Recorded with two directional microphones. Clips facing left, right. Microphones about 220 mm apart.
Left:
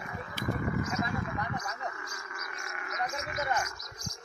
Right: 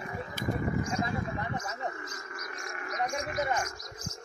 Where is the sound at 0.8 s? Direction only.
30° right (ahead or behind).